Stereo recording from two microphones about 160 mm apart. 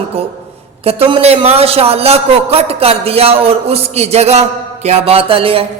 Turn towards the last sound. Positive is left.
turn(degrees=-35)  # may be behind; listen again after turning